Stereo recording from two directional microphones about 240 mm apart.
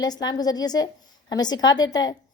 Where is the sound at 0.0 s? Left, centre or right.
Centre.